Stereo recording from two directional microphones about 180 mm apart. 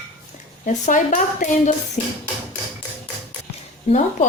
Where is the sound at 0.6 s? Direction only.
45° left (ahead or behind).